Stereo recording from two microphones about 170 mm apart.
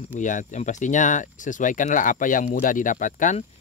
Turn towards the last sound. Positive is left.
turn(degrees=50)  # may be behind; listen again after turning